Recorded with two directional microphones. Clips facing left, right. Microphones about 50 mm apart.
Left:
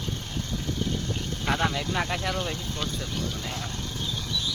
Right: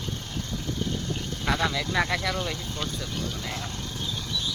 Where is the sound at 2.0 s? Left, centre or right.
Right.